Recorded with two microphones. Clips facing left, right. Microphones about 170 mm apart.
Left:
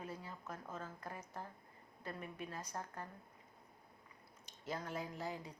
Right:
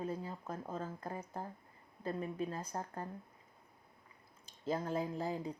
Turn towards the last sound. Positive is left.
turn(degrees=-30)  # may be behind; listen again after turning